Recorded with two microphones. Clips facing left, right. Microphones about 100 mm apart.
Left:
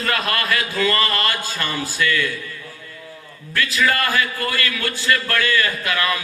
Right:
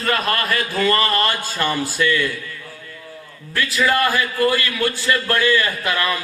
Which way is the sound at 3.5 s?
25° right (ahead or behind).